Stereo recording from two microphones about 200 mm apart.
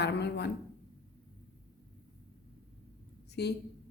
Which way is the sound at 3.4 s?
55° left (ahead or behind).